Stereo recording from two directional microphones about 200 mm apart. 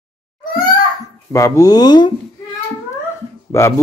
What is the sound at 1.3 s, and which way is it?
Speech, 15° left (ahead or behind).